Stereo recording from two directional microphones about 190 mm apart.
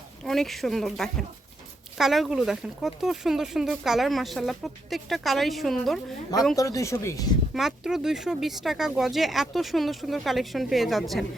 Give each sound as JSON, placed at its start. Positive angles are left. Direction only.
{"t": 0.3, "sound": "speech", "side_deg": 0}
{"t": 6.6, "sound": "speech", "side_deg": 15}
{"t": 7.5, "sound": "speech", "side_deg": 0}